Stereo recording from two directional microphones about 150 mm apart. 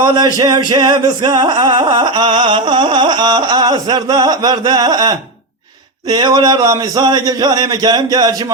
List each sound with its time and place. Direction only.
0.0 s music: 30° right (ahead or behind)